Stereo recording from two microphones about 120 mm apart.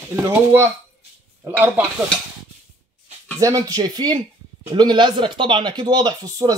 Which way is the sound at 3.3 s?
30° right (ahead or behind).